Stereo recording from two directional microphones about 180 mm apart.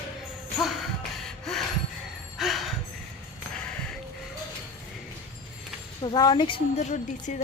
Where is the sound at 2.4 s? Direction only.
Centre (ahead or behind).